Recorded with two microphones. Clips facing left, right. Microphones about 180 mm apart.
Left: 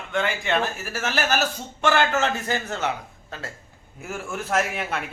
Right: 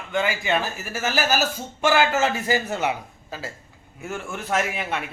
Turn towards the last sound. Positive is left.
turn(degrees=0)  # may be behind; listen again after turning